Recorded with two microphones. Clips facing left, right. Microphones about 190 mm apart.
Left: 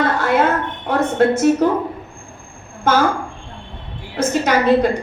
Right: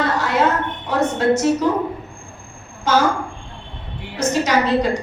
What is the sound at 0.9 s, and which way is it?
Speech, 55° left (ahead or behind).